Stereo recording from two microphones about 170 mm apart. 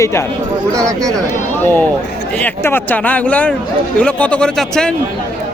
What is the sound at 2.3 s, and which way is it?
A man's voice, 10° left (ahead or behind).